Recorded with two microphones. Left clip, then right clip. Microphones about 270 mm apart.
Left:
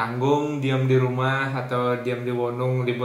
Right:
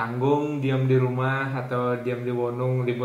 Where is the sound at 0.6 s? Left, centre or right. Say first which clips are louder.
Left 1 dB; centre.